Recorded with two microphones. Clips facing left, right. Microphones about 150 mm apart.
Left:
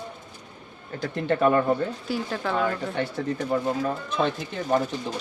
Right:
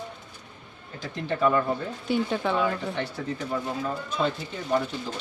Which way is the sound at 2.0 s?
Centre (ahead or behind).